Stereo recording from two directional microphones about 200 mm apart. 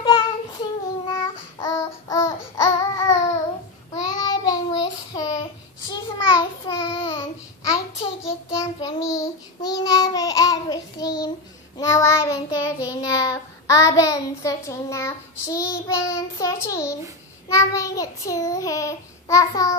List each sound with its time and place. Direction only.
0.0 s child singing: 25° left (ahead or behind)
1.2 s babbling: 15° left (ahead or behind)
3.9 s child singing: 20° left (ahead or behind)
8.7 s child singing: 15° left (ahead or behind)